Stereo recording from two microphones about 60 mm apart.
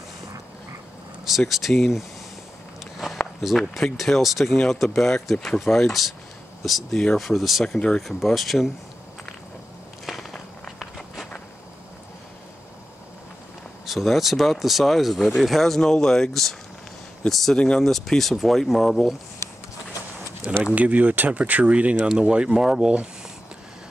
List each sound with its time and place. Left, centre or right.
1.5 s speech: centre
2.8 s walk: centre
3.4 s speech: centre
7.6 s speech: centre
10.1 s walk: centre
13.8 s speech: centre
20.6 s speech: right